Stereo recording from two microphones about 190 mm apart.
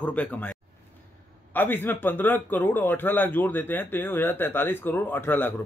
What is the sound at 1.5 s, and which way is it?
Speech, 10° left (ahead or behind).